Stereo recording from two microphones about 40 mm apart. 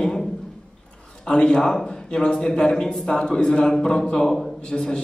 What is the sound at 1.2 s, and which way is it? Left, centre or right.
Speech, left.